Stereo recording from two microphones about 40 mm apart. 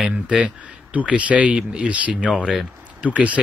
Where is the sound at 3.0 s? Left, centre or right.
Right.